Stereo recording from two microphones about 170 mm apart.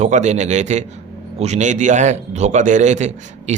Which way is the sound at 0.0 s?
45° right (ahead or behind).